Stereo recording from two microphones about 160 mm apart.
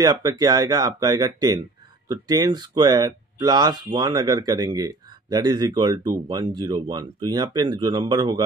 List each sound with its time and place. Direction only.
0.0 s speech: 25° right (ahead or behind)